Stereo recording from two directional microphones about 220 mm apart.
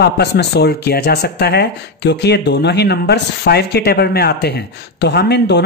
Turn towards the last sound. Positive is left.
turn(degrees=50)  # may be behind; listen again after turning